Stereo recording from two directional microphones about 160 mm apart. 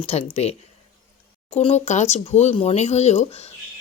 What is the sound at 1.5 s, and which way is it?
Speech, 40° left (ahead or behind).